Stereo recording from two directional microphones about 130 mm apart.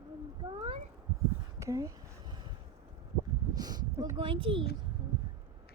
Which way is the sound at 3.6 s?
30° right (ahead or behind).